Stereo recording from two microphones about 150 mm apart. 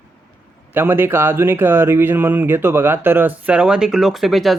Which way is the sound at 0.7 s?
15° right (ahead or behind).